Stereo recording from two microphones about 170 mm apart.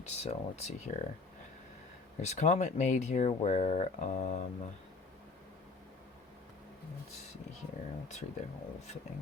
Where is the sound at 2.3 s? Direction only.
40° left (ahead or behind).